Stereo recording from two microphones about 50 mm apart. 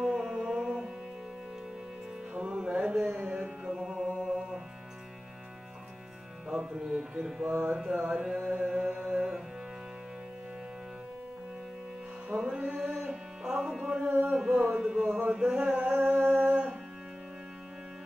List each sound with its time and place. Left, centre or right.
0.0 s music: centre
2.3 s music: centre
6.5 s carnatic music: centre
8.5 s music: centre
12.3 s music: right
14.2 s carnatic music: centre
14.5 s music: right
15.1 s carnatic music: centre
16.0 s music: right